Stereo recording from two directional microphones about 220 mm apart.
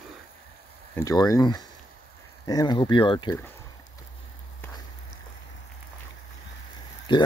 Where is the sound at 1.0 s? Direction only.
15° left (ahead or behind).